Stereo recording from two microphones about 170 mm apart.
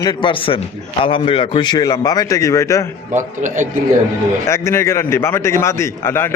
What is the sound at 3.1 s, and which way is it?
Speech, 45° right (ahead or behind).